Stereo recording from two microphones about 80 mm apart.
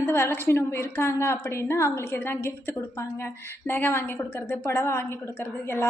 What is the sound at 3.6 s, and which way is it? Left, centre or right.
A woman's voice, left.